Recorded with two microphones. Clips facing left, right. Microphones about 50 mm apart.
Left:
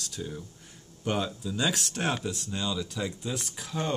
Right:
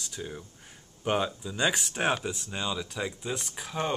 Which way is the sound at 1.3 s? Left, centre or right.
Centre.